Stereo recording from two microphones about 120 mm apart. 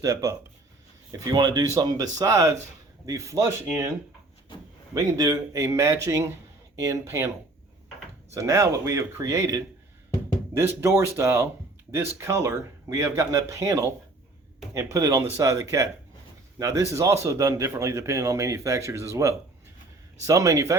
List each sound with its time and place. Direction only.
0.0 s a man's voice: 30° right (ahead or behind)
4.9 s a man's voice: 30° right (ahead or behind)